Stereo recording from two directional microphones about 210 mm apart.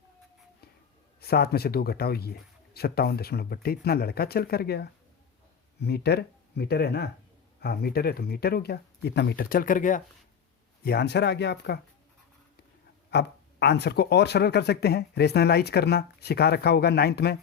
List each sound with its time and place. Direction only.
1.2 s speech: 50° left (ahead or behind)
10.8 s speech: 50° left (ahead or behind)
13.1 s speech: 55° left (ahead or behind)